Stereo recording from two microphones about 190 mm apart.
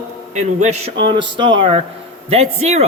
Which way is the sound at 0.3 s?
35° right (ahead or behind).